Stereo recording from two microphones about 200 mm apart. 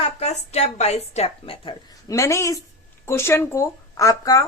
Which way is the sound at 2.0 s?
15° left (ahead or behind).